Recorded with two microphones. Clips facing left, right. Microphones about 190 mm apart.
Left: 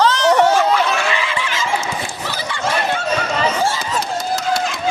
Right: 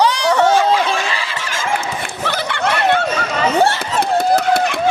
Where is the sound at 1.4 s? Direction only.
45° right (ahead or behind).